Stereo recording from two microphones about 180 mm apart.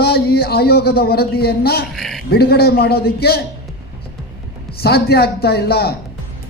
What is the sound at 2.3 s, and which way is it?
Speech, 60° left (ahead or behind).